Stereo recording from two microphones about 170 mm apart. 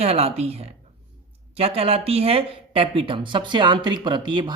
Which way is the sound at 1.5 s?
35° right (ahead or behind).